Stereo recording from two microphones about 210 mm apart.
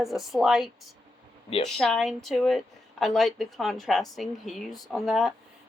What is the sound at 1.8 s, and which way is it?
A woman's voice, centre (ahead or behind).